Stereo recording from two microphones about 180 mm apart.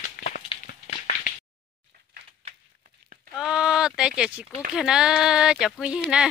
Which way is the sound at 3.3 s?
5° right (ahead or behind).